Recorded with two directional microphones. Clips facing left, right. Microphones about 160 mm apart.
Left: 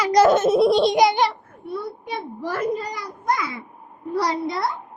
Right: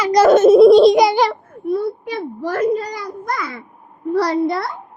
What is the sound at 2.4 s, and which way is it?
A child's voice, 45° right (ahead or behind).